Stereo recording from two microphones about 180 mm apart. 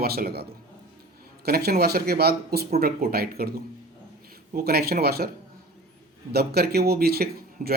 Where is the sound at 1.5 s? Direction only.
55° right (ahead or behind).